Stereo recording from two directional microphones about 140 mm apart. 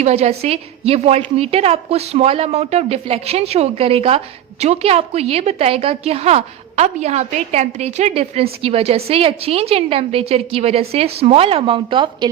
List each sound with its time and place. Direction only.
0.0 s a woman's voice: 50° right (ahead or behind)